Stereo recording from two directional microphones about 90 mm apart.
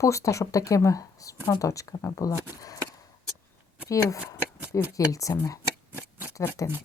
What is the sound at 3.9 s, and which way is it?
A woman's voice, 40° left (ahead or behind).